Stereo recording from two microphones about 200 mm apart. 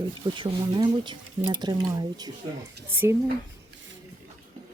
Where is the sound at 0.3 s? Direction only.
20° right (ahead or behind).